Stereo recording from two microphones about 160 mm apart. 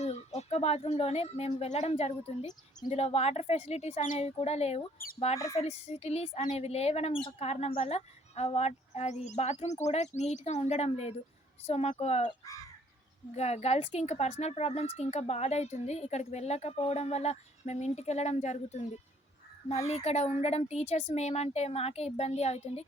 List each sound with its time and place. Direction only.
0.0 s a woman's voice: 40° left (ahead or behind)
13.3 s a woman's voice: 40° left (ahead or behind)
20.1 s speech: 40° left (ahead or behind)